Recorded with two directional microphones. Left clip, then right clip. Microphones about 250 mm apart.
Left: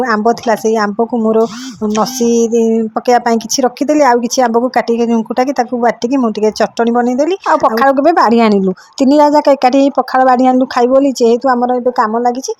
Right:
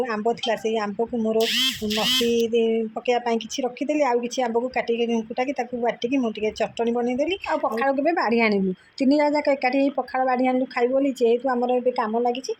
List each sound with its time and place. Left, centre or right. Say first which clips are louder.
0.1 s speech: left 12 dB; left